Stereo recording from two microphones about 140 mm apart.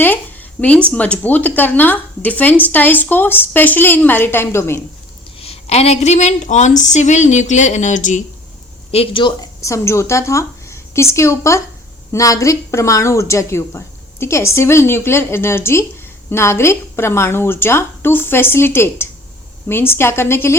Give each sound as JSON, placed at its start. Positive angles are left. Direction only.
{"t": 0.0, "sound": "a sound", "side_deg": 15}
{"t": 0.9, "sound": "a woman's voice", "side_deg": 10}
{"t": 5.4, "sound": "a woman's voice", "side_deg": 45}
{"t": 8.9, "sound": "speech", "side_deg": 40}
{"t": 9.6, "sound": "a woman's voice", "side_deg": 20}